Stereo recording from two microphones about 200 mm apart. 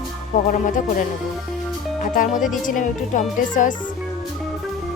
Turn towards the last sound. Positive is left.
turn(degrees=40)  # may be behind; listen again after turning